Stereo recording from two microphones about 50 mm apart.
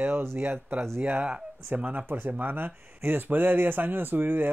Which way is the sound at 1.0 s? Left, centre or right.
Right.